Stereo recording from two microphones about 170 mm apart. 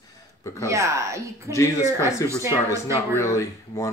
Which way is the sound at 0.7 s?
15° right (ahead or behind).